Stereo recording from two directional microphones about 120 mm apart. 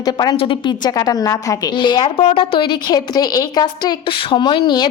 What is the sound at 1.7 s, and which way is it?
A woman's voice, 40° left (ahead or behind).